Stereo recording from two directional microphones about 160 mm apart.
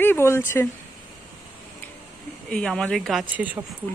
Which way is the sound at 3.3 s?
10° right (ahead or behind).